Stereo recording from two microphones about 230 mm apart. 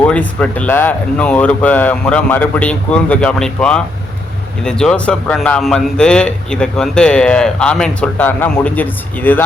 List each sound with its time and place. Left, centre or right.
0.0 s a man's voice: centre